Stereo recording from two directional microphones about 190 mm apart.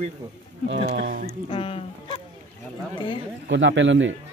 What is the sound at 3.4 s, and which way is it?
Speech, 75° right (ahead or behind).